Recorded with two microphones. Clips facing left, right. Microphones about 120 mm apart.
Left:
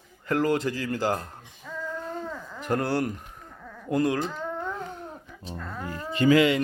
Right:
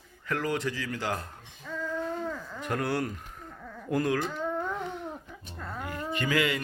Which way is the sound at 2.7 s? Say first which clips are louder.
Left 4 dB; 30° left (ahead or behind).